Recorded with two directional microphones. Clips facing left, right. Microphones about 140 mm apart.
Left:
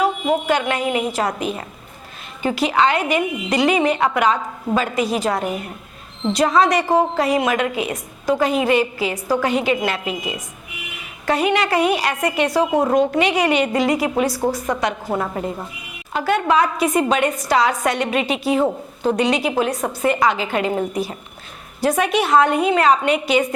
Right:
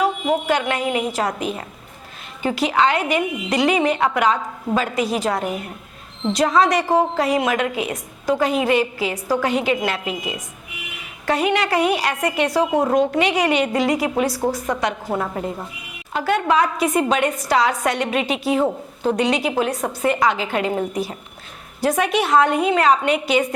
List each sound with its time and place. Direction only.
0.0 s a sound: 15° left (ahead or behind)
0.4 s a woman's voice: 15° left (ahead or behind)
2.4 s a woman's voice: 15° left (ahead or behind)
4.4 s speech: 25° left (ahead or behind)
4.8 s a woman's voice: 15° left (ahead or behind)
14.3 s a woman's voice: 30° left (ahead or behind)
16.1 s a woman's voice: 15° left (ahead or behind)
21.8 s a woman's voice: 10° left (ahead or behind)